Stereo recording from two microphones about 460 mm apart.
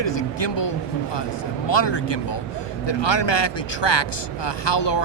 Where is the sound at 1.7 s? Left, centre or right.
Left.